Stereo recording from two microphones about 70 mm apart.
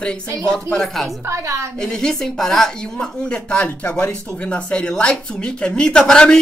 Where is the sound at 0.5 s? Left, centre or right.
Centre.